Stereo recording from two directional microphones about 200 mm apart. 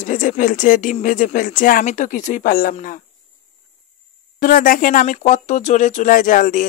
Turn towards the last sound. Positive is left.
turn(degrees=45)  # may be behind; listen again after turning